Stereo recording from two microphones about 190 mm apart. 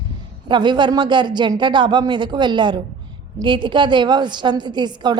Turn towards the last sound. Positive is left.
turn(degrees=-25)  # may be behind; listen again after turning